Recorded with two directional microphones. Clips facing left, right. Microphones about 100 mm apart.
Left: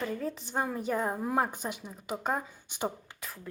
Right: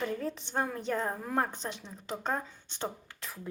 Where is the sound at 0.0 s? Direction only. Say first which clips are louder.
Even; centre (ahead or behind).